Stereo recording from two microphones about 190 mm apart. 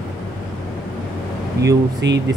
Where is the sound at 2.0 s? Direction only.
65° right (ahead or behind).